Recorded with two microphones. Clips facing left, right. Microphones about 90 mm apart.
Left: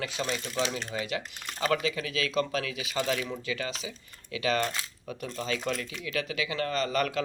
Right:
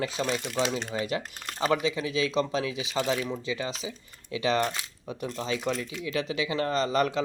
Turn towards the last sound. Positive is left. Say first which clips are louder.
# right 3 dB
turn(degrees=-25)  # may be behind; listen again after turning